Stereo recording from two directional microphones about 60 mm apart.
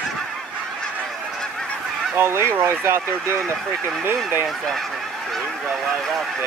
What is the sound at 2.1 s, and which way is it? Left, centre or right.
Speech, right.